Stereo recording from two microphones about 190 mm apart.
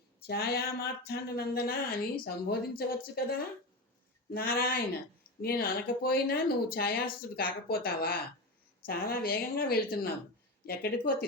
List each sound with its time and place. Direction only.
0.2 s speech: 55° left (ahead or behind)